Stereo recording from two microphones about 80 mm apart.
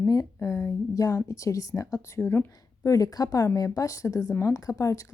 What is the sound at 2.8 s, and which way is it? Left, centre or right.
A woman's voice, left.